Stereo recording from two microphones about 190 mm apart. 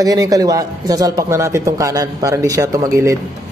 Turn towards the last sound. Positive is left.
turn(degrees=-15)  # may be behind; listen again after turning